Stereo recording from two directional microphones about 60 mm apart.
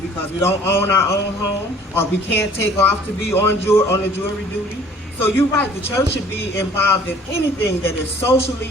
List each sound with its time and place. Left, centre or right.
0.4 s a woman's voice: left
5.2 s a woman's voice: left